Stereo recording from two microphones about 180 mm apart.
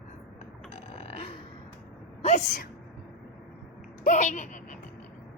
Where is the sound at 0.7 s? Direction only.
35° left (ahead or behind).